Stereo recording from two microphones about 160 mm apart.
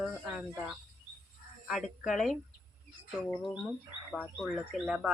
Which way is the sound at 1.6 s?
Centre (ahead or behind).